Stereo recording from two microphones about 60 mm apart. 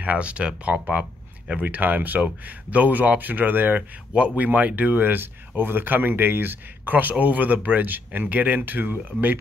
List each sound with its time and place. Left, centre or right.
0.0 s speech: right